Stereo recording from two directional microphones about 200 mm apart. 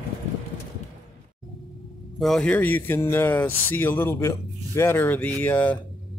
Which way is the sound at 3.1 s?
10° left (ahead or behind).